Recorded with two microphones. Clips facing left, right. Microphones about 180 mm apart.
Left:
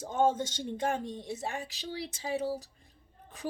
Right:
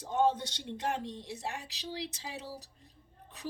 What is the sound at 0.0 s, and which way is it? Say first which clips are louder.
A woman's voice: left 1 dB; 45° left (ahead or behind).